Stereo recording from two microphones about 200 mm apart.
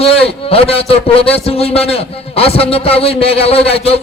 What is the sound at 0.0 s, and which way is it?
A man's voice, 30° left (ahead or behind).